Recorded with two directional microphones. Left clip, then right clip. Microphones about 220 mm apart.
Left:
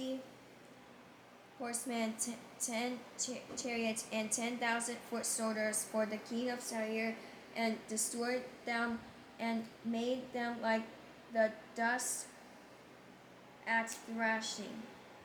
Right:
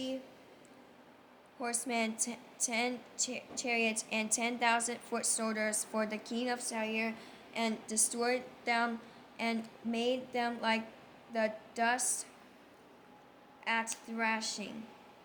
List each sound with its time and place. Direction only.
1.6 s a woman's voice: 25° right (ahead or behind)
13.7 s a woman's voice: 25° right (ahead or behind)